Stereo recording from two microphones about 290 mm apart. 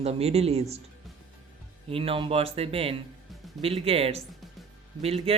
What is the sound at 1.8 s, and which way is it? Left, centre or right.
Speech, centre.